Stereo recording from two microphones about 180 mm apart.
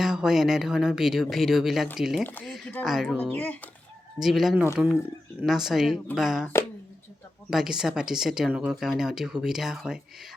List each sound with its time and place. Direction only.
0.0 s speech: 5° right (ahead or behind)
4.2 s speech: centre (ahead or behind)
7.5 s speech: centre (ahead or behind)